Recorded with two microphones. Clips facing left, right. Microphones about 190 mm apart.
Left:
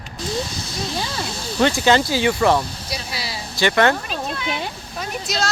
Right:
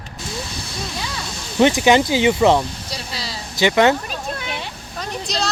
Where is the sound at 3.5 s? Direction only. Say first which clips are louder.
Right 2 dB; 15° right (ahead or behind).